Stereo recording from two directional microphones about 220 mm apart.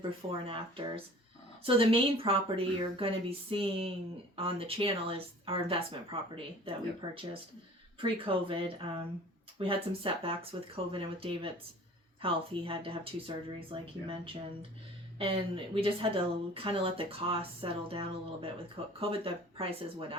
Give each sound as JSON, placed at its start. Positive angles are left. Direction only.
{"t": 0.4, "sound": "speech", "side_deg": -25}